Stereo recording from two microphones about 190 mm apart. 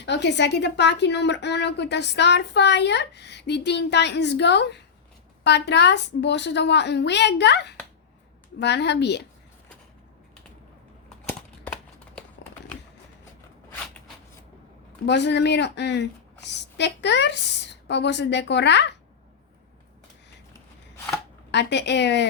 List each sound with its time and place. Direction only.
0.0 s a woman's voice: 65° left (ahead or behind)
11.3 s a sound: 5° left (ahead or behind)
15.0 s a woman's voice: 65° left (ahead or behind)
21.5 s a woman's voice: 65° left (ahead or behind)